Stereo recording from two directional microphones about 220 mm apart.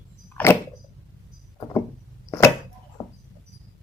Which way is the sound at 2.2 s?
15° left (ahead or behind).